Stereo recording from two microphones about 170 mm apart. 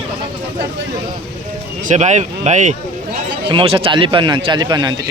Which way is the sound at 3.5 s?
30° right (ahead or behind).